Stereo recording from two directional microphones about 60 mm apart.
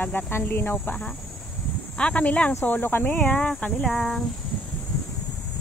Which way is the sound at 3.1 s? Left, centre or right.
Left.